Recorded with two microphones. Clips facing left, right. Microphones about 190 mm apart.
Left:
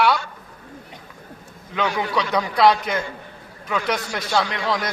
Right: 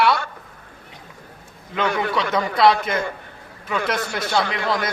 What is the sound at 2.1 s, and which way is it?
Speech, centre (ahead or behind).